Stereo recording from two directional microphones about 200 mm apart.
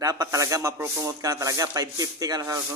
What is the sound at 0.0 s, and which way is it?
Speech, 15° right (ahead or behind).